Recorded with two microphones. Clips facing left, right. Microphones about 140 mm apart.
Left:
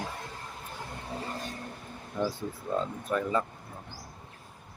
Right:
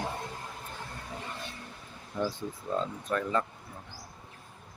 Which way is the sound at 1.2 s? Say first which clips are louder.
Left 5 dB; 40° left (ahead or behind).